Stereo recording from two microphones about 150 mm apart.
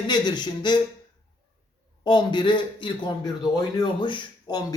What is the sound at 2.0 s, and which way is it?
A man's voice, 30° left (ahead or behind).